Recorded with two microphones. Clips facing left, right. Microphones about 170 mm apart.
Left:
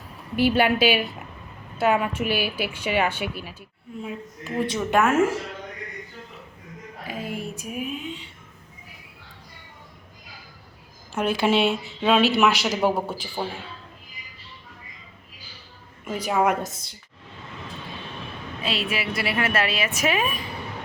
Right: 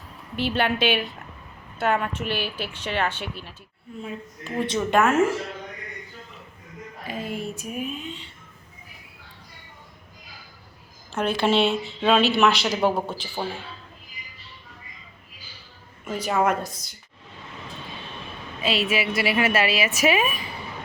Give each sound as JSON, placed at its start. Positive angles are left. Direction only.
{"t": 0.3, "sound": "a woman's voice", "side_deg": 10}
{"t": 7.1, "sound": "a sound", "side_deg": 5}
{"t": 11.1, "sound": "speech", "side_deg": 10}
{"t": 16.0, "sound": "a woman's voice", "side_deg": 10}
{"t": 18.6, "sound": "a woman's voice", "side_deg": 0}